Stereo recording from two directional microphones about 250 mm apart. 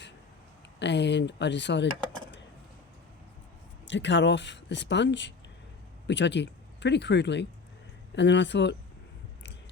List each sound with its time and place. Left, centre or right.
0.8 s speech: left
3.8 s speech: left